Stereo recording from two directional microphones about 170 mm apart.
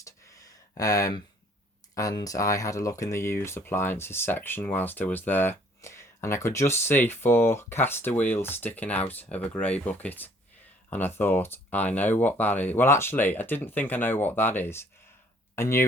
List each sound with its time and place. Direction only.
0.8 s speech: 20° left (ahead or behind)